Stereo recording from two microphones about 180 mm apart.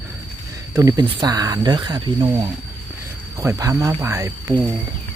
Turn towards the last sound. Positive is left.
turn(degrees=-15)  # may be behind; listen again after turning